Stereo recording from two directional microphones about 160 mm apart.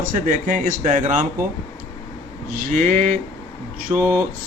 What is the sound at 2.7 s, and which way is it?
Speech, 50° right (ahead or behind).